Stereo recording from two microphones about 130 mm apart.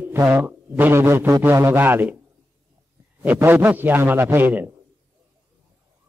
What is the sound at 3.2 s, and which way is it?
A man's voice, 15° right (ahead or behind).